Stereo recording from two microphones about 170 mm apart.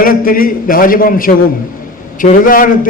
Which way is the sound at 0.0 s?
55° left (ahead or behind).